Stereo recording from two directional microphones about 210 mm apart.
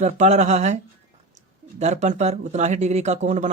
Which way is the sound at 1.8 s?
35° right (ahead or behind).